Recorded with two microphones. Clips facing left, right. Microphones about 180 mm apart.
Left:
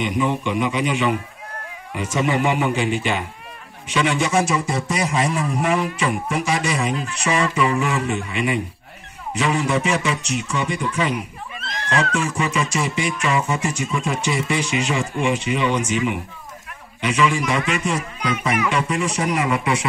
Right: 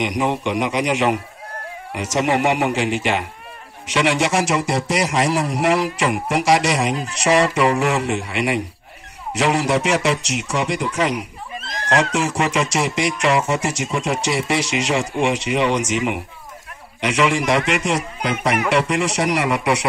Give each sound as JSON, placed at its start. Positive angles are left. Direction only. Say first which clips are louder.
{"t": 0.2, "sound": "music", "louder": "even", "side_deg": -80}
{"t": 11.5, "sound": "a sound", "louder": "right 2 dB", "side_deg": -40}
{"t": 11.9, "sound": "music", "louder": "right 3 dB", "side_deg": -80}